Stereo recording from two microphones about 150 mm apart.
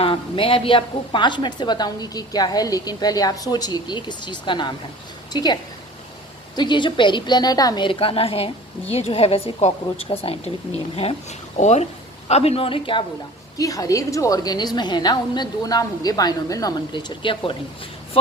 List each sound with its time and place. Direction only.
0.0 s a woman's voice: 35° left (ahead or behind)
6.6 s a woman's voice: 30° left (ahead or behind)
13.6 s a woman's voice: 25° left (ahead or behind)